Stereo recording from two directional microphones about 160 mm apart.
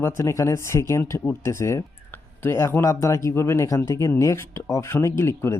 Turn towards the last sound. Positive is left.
turn(degrees=15)  # may be behind; listen again after turning